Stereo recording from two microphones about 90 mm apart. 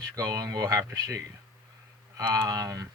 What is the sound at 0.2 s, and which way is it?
A man's voice, 45° right (ahead or behind).